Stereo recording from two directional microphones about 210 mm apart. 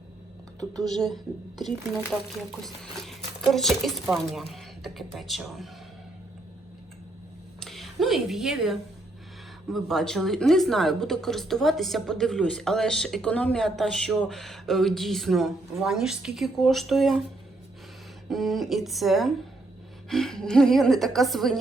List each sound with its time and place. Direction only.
0.8 s speech: centre (ahead or behind)
7.6 s a sound: centre (ahead or behind)
9.6 s speech: centre (ahead or behind)
18.3 s speech: centre (ahead or behind)